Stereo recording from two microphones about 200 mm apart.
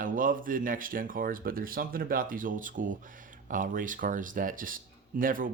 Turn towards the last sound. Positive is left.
turn(degrees=-45)  # may be behind; listen again after turning